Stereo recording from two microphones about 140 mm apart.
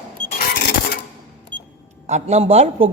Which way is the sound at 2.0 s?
55° right (ahead or behind).